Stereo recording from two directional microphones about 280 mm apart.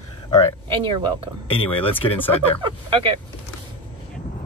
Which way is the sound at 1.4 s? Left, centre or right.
Centre.